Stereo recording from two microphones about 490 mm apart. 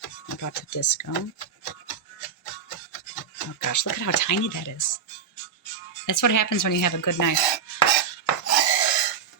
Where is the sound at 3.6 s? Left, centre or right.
Left.